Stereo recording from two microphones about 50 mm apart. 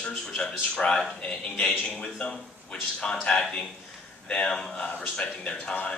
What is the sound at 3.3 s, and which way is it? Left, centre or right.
A man's voice, centre.